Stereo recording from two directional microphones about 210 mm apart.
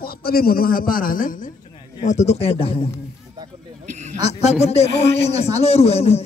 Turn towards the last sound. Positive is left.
turn(degrees=30)  # may be behind; listen again after turning